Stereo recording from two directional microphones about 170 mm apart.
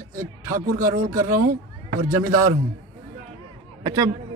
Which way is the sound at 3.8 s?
20° right (ahead or behind).